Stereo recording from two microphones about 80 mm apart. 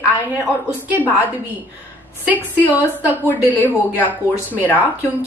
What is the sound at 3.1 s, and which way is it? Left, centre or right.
A woman's voice, left.